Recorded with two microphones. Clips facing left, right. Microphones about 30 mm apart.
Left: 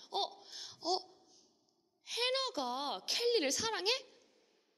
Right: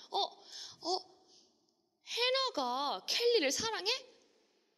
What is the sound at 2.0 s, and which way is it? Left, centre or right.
A woman's voice, centre.